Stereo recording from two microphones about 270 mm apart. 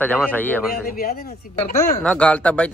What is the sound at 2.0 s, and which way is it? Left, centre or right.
Speech, centre.